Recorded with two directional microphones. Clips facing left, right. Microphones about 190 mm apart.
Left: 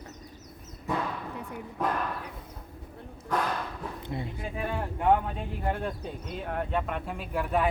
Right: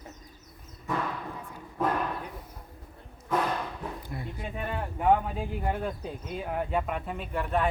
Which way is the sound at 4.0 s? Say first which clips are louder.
Left 4 dB; 25° left (ahead or behind).